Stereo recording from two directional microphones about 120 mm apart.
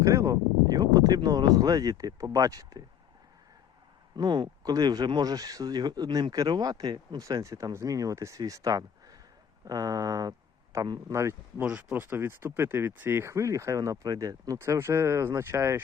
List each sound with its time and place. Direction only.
0.0 s speech: 25° right (ahead or behind)
4.2 s speech: 40° right (ahead or behind)
7.2 s speech: 25° right (ahead or behind)
11.7 s speech: 15° right (ahead or behind)